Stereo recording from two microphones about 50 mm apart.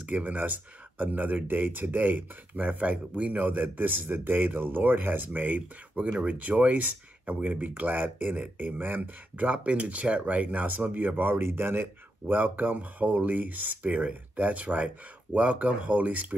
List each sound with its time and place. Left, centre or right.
0.0 s speech: right
2.8 s speech: right
5.9 s speech: right